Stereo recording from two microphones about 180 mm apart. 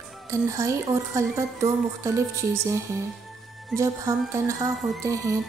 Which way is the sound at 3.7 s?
15° right (ahead or behind).